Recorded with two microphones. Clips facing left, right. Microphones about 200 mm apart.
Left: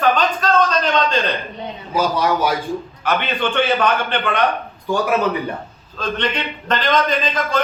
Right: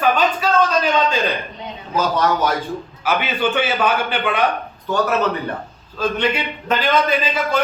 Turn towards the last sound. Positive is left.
turn(degrees=-10)  # may be behind; listen again after turning